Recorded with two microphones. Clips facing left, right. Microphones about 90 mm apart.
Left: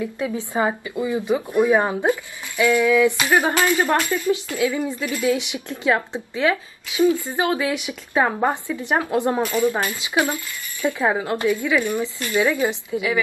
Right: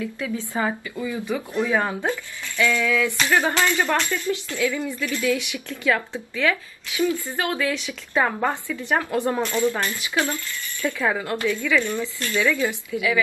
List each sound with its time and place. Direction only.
0.0 s a woman's voice: 20° left (ahead or behind)